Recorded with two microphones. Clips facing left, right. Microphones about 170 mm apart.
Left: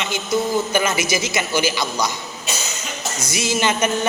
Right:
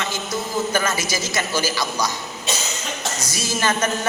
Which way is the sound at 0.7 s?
15° left (ahead or behind).